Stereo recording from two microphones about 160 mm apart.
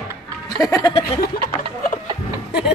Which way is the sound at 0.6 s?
25° left (ahead or behind).